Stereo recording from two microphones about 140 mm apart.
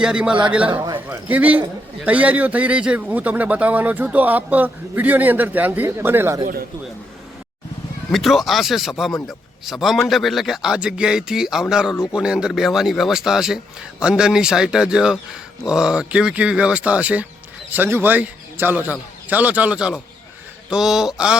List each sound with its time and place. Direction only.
0.0 s a man's voice: 5° right (ahead or behind)
0.7 s a man's voice: 30° right (ahead or behind)
0.9 s a man's voice: 15° right (ahead or behind)
8.1 s a man's voice: centre (ahead or behind)